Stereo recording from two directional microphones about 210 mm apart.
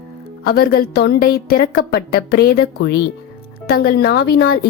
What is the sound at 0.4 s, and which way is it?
Speech, 50° left (ahead or behind).